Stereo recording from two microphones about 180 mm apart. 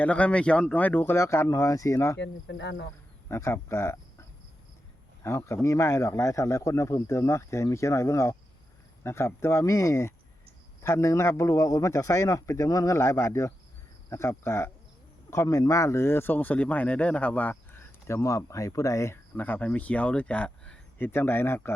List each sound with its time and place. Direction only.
0.0 s speech: 5° left (ahead or behind)
2.1 s speech: 80° left
3.2 s speech: 15° left (ahead or behind)